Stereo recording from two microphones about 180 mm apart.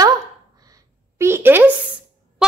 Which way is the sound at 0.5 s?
20° right (ahead or behind).